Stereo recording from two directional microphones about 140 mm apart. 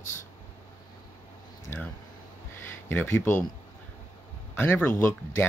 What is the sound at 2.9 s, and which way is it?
Speech, 15° left (ahead or behind).